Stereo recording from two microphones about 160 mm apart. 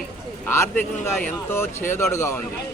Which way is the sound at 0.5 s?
15° left (ahead or behind).